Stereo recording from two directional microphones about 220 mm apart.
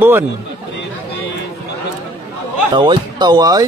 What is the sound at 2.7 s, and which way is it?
Speech, 20° right (ahead or behind).